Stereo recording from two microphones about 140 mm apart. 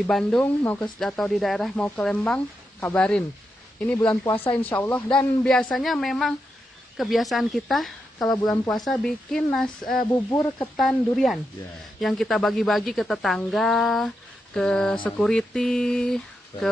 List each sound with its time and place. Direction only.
0.0 s speech: 5° left (ahead or behind)
10.1 s speech: 20° left (ahead or behind)
10.8 s speech: centre (ahead or behind)